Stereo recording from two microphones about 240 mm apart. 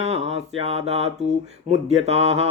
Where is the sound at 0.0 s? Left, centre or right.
Right.